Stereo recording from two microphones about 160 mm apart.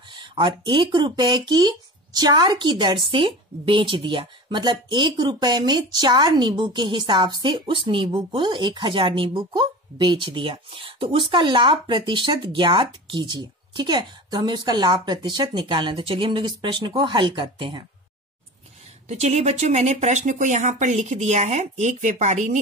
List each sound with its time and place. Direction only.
0.1 s speech: 30° right (ahead or behind)
19.0 s speech: 45° right (ahead or behind)